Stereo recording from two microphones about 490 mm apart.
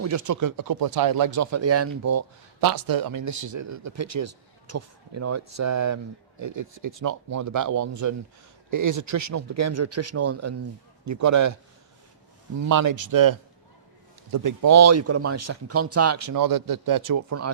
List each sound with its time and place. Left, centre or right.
0.0 s speech: right
12.5 s speech: right
14.3 s speech: right